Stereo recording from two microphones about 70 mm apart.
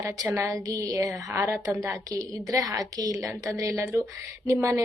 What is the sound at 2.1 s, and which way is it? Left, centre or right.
A woman's voice, right.